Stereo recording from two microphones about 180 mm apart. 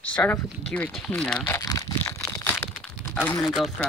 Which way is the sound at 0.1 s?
5° left (ahead or behind).